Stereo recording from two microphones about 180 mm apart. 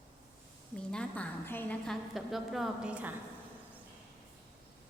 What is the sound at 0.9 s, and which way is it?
A woman's voice, 5° left (ahead or behind).